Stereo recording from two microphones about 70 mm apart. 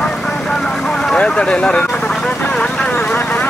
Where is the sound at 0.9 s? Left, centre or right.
Centre.